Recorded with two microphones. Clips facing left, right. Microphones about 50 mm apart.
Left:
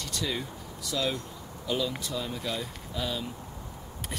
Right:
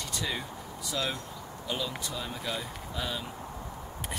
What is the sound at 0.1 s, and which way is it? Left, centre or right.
Speech, centre.